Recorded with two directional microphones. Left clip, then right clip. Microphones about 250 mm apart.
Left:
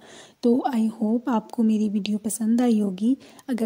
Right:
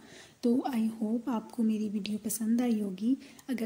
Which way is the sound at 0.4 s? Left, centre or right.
Left.